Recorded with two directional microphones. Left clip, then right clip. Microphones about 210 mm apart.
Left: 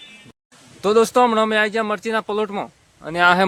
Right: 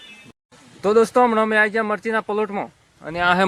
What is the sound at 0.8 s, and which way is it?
Speech, 5° left (ahead or behind).